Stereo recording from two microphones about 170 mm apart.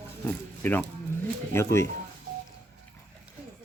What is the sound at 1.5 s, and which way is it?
Speech, 15° left (ahead or behind).